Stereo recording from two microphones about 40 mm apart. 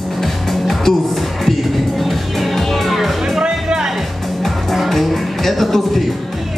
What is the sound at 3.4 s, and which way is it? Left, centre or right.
Music, right.